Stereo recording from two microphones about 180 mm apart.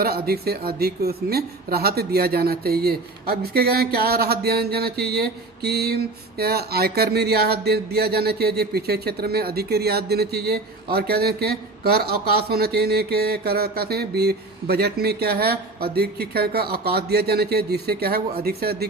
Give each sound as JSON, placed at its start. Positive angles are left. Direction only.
{"t": 0.3, "sound": "speech", "side_deg": -60}